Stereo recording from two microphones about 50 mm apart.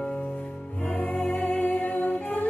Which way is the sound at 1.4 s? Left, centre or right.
Left.